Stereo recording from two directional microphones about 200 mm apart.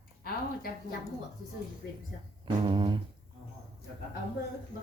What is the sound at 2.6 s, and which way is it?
Speech, 25° right (ahead or behind).